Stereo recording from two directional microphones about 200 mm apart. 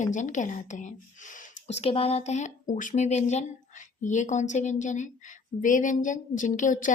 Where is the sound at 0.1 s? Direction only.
40° left (ahead or behind).